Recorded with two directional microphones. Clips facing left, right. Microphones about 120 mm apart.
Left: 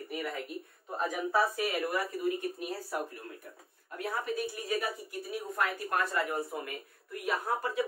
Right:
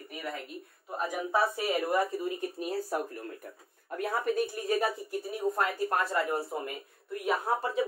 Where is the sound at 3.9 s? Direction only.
45° right (ahead or behind).